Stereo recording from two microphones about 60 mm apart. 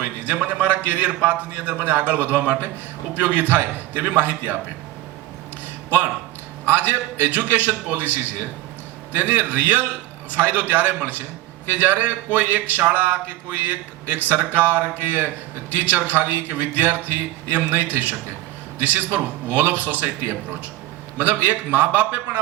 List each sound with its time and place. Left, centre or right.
0.0 s speech: right
6.7 s speech: right
21.4 s speech: right